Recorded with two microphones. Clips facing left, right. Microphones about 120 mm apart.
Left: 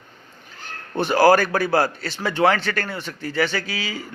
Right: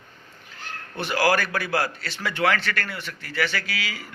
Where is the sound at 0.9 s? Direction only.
35° left (ahead or behind).